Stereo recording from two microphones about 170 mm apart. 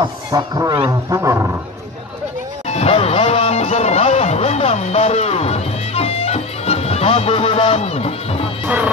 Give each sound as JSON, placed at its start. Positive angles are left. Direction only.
{"t": 0.0, "sound": "speech", "side_deg": -25}
{"t": 2.7, "sound": "music", "side_deg": 35}
{"t": 8.6, "sound": "music", "side_deg": -10}